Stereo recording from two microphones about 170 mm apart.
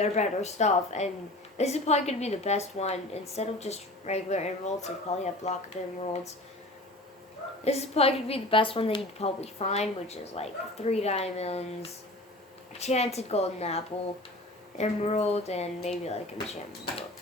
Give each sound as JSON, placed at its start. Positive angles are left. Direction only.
{"t": 0.0, "sound": "a woman's voice", "side_deg": 40}
{"t": 7.6, "sound": "a woman's voice", "side_deg": 40}